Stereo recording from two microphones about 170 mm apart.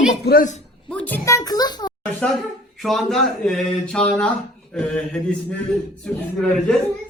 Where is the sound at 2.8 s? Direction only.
Centre (ahead or behind).